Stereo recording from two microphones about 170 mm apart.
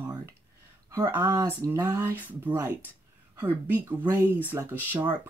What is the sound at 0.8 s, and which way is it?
A woman's voice, 15° right (ahead or behind).